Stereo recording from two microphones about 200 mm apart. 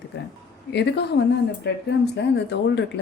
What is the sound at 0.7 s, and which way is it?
Speech, 55° left (ahead or behind).